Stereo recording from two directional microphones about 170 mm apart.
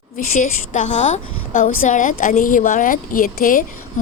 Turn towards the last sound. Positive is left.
turn(degrees=55)  # may be behind; listen again after turning